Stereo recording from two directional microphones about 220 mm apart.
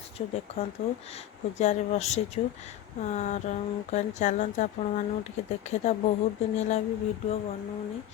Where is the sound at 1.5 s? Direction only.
30° left (ahead or behind).